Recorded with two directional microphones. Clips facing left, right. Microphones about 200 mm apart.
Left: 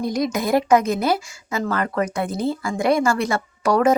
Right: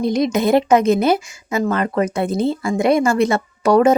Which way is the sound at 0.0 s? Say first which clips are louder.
Right 5 dB; 25° right (ahead or behind).